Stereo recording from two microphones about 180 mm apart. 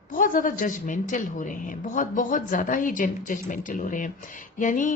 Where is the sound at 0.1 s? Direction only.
50° left (ahead or behind).